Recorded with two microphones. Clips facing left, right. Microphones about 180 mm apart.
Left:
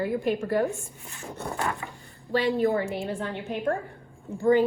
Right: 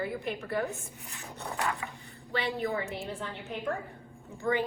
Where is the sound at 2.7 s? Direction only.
60° left (ahead or behind).